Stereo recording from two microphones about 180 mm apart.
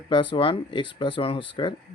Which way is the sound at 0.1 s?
30° left (ahead or behind).